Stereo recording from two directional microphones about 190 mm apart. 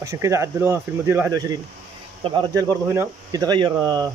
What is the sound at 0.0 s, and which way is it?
Speech, 15° right (ahead or behind).